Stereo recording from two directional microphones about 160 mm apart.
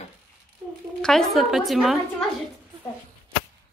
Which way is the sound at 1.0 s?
5° left (ahead or behind).